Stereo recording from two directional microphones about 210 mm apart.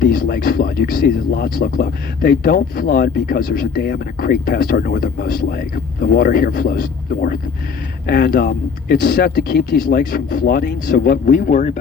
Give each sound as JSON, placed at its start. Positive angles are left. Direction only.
{"t": 0.0, "sound": "speech", "side_deg": 45}